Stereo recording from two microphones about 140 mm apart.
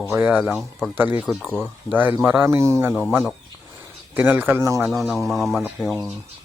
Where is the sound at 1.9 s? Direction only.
15° right (ahead or behind).